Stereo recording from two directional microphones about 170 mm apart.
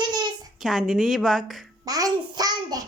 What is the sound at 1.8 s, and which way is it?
A child's voice, 20° right (ahead or behind).